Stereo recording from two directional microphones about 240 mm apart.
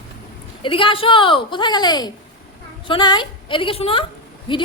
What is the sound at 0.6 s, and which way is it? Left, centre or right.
A woman's voice, left.